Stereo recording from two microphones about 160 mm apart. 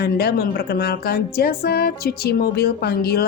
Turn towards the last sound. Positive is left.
turn(degrees=80)